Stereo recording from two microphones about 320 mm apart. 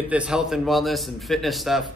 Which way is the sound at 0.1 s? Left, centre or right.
Centre.